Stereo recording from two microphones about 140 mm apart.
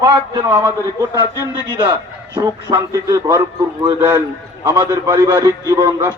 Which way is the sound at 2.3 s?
25° right (ahead or behind).